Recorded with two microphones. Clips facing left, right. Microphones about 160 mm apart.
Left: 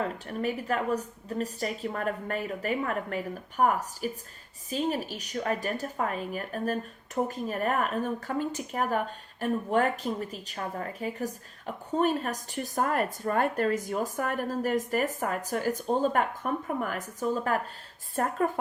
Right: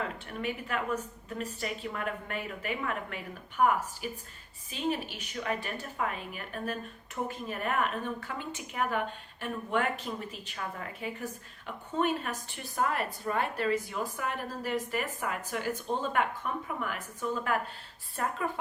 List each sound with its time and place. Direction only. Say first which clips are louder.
0.0 s speech: left 5 dB; 40° left (ahead or behind)